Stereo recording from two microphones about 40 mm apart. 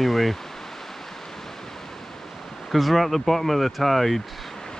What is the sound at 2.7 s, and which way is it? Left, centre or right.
Speech, centre.